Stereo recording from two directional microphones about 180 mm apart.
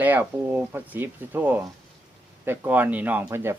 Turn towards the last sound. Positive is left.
turn(degrees=-15)  # may be behind; listen again after turning